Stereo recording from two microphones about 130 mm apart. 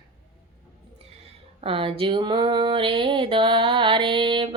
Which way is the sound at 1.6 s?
45° right (ahead or behind).